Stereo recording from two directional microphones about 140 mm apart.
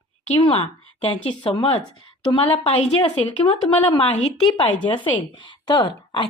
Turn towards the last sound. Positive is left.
turn(degrees=35)  # may be behind; listen again after turning